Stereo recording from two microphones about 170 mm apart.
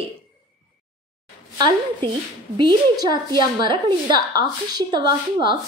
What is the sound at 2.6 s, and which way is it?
A woman's voice, 25° right (ahead or behind).